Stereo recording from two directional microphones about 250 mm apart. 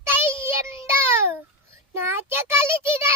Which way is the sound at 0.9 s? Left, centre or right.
Centre.